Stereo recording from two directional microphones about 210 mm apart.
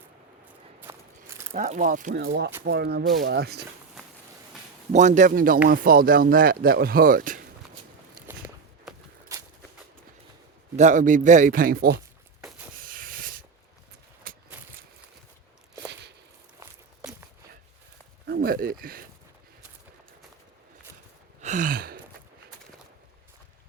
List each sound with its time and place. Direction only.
0.8 s walk: 10° right (ahead or behind)
1.5 s a man's voice: 35° right (ahead or behind)
2.2 s speech: 50° right (ahead or behind)
4.9 s a man's voice: 35° right (ahead or behind)
8.3 s walk: 10° right (ahead or behind)
10.8 s a man's voice: 35° right (ahead or behind)
12.8 s hiss: 40° right (ahead or behind)
14.3 s a sound: 40° right (ahead or behind)
15.9 s a sound: 55° right (ahead or behind)
18.3 s speech: 45° right (ahead or behind)
21.4 s gasp: 35° right (ahead or behind)